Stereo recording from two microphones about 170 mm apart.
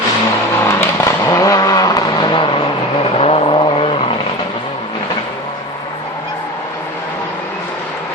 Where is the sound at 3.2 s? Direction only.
35° left (ahead or behind).